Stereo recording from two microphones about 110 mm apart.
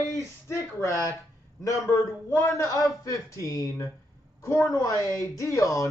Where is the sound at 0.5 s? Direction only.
25° left (ahead or behind).